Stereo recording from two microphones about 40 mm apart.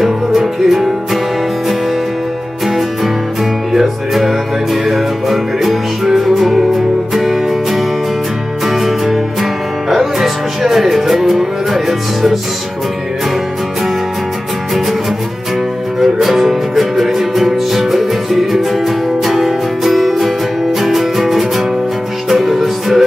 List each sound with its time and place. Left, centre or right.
0.7 s music: centre
2.6 s music: centre
16.0 s music: centre